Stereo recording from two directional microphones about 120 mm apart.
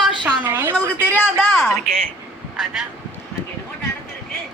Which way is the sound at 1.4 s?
Centre (ahead or behind).